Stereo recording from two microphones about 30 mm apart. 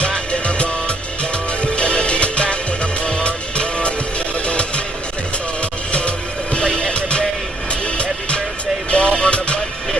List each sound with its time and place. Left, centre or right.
0.0 s music: left
5.9 s music: left
8.9 s music: left